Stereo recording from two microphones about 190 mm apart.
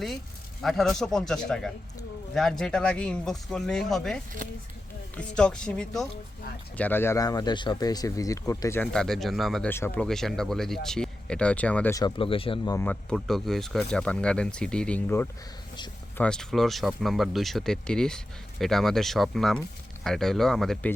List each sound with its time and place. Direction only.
0.6 s speech: centre (ahead or behind); by 8.8 s 15° left (ahead or behind)
8.8 s speech: 5° left (ahead or behind)
11.9 s speech: 25° left (ahead or behind)
12.7 s speech: 10° left (ahead or behind)